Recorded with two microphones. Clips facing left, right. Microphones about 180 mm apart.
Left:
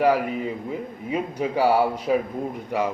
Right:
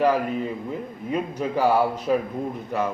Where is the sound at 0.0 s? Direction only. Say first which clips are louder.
Left 1 dB; 10° left (ahead or behind).